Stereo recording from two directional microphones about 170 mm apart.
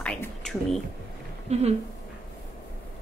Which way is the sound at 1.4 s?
40° right (ahead or behind).